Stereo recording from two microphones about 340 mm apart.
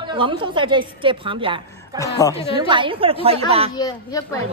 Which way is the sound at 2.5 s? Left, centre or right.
Centre.